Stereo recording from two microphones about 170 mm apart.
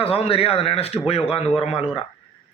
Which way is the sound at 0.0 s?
35° left (ahead or behind).